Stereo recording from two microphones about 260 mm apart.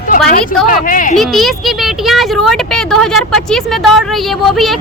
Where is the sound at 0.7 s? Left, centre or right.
Left.